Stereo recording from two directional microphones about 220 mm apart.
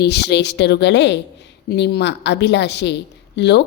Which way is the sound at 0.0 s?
50° left (ahead or behind).